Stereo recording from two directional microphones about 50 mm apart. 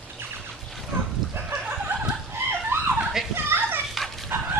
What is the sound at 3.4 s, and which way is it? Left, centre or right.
Children playing, right.